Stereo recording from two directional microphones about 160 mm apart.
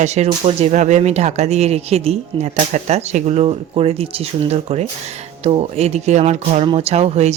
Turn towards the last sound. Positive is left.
turn(degrees=-45)  # may be behind; listen again after turning